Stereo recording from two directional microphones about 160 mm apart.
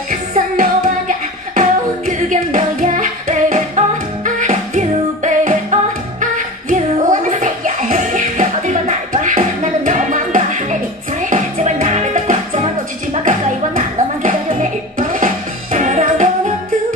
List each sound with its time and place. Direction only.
0.1 s music: 55° right (ahead or behind)